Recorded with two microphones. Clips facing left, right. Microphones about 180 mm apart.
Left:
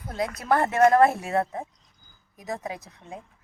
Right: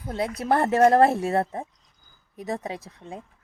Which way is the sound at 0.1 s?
30° right (ahead or behind).